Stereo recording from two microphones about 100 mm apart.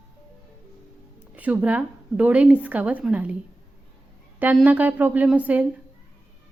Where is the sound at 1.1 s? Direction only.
15° right (ahead or behind).